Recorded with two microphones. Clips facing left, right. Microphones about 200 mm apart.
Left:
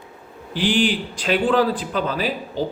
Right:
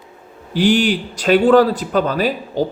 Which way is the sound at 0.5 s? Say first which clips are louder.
Right 5 dB; 45° right (ahead or behind).